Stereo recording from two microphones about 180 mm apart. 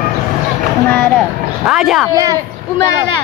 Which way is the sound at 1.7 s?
Centre (ahead or behind).